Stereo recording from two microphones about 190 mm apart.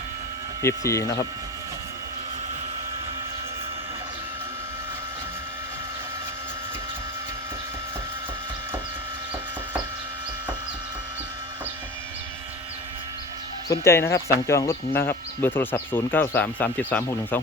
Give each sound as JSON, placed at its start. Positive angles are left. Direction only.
{"t": 0.6, "sound": "speech", "side_deg": 15}
{"t": 13.7, "sound": "speech", "side_deg": 15}